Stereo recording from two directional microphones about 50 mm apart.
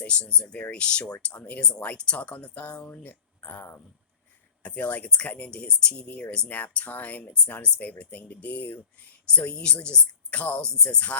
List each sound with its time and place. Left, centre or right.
0.0 s speech: left
4.6 s speech: left
5.5 s speech: centre